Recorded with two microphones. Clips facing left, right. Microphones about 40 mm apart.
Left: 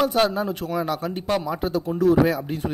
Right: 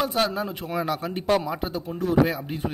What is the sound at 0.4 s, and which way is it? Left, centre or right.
Speech, right.